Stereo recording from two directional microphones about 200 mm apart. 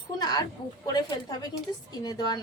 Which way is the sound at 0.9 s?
20° left (ahead or behind).